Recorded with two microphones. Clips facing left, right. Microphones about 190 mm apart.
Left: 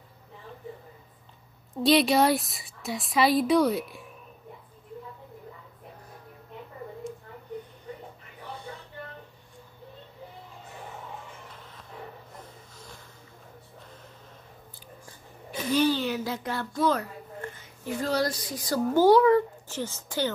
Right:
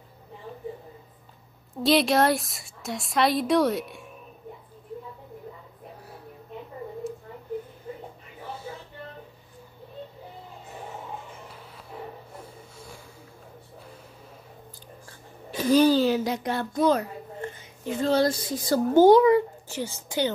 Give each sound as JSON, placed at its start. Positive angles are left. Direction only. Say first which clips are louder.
{"t": 1.8, "sound": "a woman's voice", "louder": "even", "side_deg": 0}
{"t": 12.4, "sound": "snort", "louder": "right 4 dB", "side_deg": -10}
{"t": 15.5, "sound": "a sound", "louder": "right 6 dB", "side_deg": -40}
{"t": 16.3, "sound": "a child's voice", "louder": "right 4 dB", "side_deg": -20}